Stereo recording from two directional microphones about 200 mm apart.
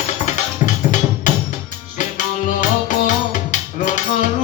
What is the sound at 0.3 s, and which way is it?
Music, 40° left (ahead or behind).